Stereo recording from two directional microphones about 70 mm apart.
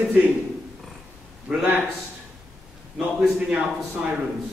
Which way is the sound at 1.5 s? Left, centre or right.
Centre.